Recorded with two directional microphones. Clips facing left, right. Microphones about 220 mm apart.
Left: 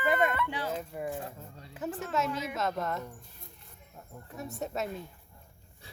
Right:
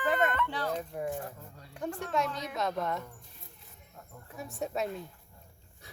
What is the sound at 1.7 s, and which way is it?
A woman's voice, 5° left (ahead or behind).